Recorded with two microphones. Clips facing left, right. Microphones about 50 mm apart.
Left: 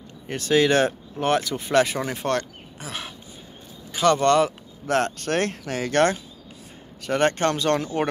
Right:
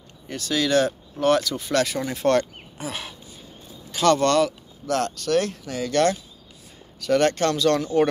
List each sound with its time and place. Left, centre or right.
0.3 s speech: left
1.1 s speech: left
2.2 s speech: centre
3.9 s speech: centre
4.4 s speech: left
7.0 s speech: left